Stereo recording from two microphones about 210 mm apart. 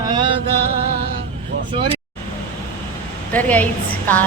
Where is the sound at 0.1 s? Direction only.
25° right (ahead or behind).